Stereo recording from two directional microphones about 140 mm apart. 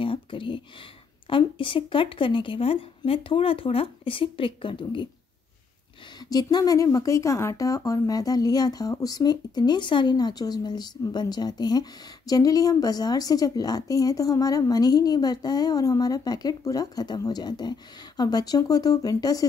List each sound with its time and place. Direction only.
0.0 s speech: 40° left (ahead or behind)
6.2 s speech: 30° left (ahead or behind)